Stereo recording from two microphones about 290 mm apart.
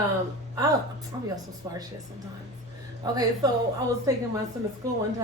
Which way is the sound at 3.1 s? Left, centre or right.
Centre.